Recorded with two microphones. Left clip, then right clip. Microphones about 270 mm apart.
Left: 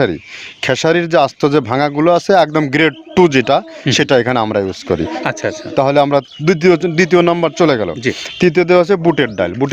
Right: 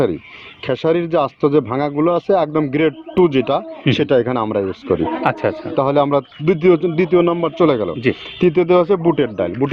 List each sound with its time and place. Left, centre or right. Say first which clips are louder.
0.6 s speech: left 4 dB; left
5.2 s speech: right 1 dB; centre
5.7 s speech: left 4 dB; left